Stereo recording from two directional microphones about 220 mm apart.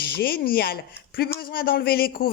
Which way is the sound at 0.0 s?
45° left (ahead or behind).